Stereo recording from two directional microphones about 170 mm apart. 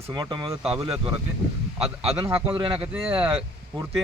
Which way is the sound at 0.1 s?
25° right (ahead or behind).